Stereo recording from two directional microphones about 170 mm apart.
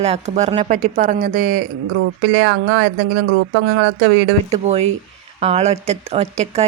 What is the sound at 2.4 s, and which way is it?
Speech, 90° right.